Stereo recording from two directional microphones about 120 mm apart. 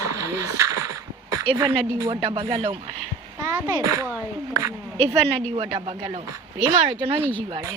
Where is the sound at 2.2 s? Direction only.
50° right (ahead or behind).